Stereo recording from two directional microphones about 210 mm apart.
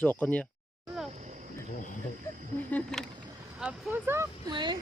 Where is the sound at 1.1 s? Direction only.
35° right (ahead or behind).